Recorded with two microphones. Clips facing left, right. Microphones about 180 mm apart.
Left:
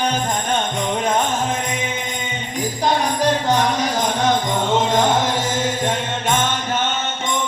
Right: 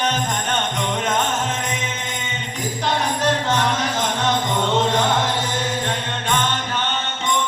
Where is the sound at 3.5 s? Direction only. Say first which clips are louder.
Left 3 dB; 40° left (ahead or behind).